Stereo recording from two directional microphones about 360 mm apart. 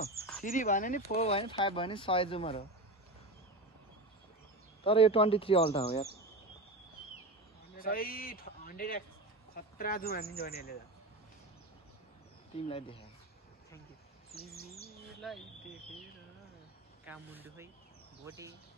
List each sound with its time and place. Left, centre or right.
0.4 s speech: left
4.8 s speech: centre
7.7 s a man's voice: left
12.5 s speech: centre
15.2 s speech: centre
17.0 s speech: centre